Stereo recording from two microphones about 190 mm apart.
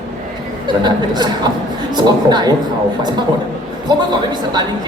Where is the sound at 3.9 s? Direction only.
20° right (ahead or behind).